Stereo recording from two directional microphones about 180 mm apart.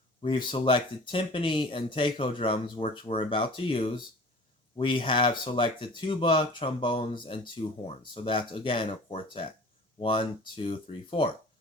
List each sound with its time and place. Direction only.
0.2 s speech: 30° left (ahead or behind)